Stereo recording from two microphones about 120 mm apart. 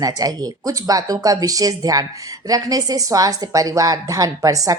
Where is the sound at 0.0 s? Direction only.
30° right (ahead or behind).